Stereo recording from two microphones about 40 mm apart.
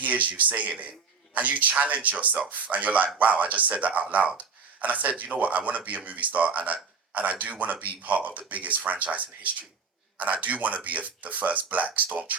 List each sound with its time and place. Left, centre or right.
0.0 s a man's voice: right